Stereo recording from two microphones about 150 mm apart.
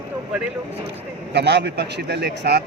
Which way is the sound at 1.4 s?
90° right.